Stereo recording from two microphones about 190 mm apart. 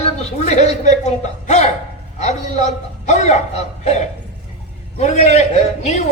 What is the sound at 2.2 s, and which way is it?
A man's voice, 35° left (ahead or behind).